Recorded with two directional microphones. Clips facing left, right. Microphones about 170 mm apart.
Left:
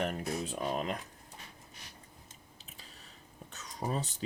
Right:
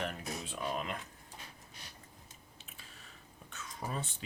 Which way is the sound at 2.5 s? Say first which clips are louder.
Left 1 dB; 35° left (ahead or behind).